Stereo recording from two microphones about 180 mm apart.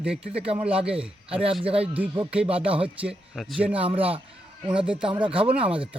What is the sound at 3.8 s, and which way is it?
A man's voice, 30° right (ahead or behind).